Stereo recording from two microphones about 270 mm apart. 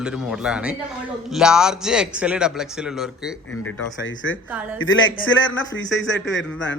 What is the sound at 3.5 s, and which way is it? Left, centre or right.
Speech, left.